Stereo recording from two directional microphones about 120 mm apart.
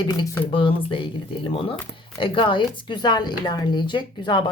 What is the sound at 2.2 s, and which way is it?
A woman's voice, 45° left (ahead or behind).